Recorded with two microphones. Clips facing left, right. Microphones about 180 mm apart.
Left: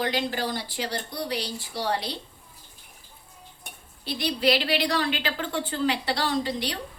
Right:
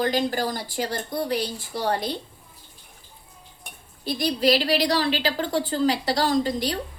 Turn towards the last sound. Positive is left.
turn(degrees=-40)  # may be behind; listen again after turning